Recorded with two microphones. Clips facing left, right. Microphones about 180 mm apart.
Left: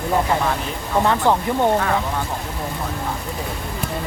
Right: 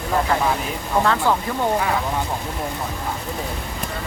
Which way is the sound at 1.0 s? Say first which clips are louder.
Left 2 dB; 20° left (ahead or behind).